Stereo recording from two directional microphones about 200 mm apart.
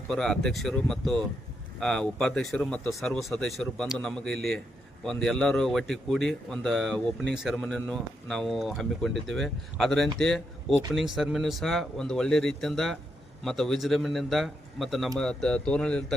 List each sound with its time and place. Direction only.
0.1 s speech: centre (ahead or behind)